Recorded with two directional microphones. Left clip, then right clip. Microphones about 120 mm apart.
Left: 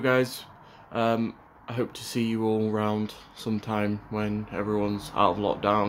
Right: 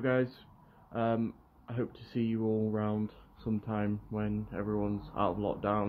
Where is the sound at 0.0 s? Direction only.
30° left (ahead or behind).